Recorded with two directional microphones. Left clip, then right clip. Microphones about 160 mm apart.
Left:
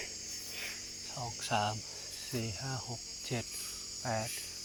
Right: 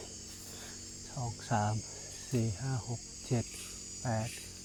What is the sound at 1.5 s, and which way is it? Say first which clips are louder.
Speech: left 1 dB; 35° right (ahead or behind).